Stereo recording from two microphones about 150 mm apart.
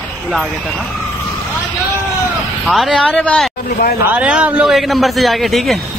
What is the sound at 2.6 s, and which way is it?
Speech, centre (ahead or behind).